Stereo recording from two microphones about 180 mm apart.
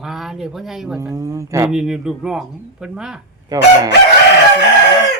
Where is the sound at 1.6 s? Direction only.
5° right (ahead or behind).